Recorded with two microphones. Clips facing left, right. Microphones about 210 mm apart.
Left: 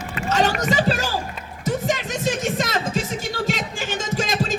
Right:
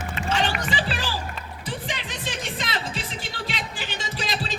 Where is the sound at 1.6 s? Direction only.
45° left (ahead or behind).